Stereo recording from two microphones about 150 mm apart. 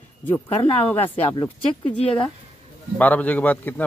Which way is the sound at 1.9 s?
40° left (ahead or behind).